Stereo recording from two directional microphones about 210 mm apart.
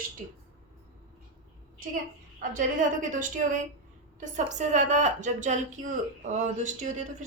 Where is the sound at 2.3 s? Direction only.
40° right (ahead or behind).